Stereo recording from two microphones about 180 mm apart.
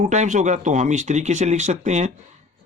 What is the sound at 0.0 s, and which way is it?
Speech, 40° right (ahead or behind).